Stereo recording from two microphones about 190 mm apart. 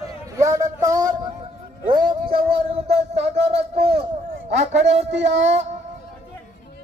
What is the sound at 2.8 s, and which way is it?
Speech, 35° right (ahead or behind).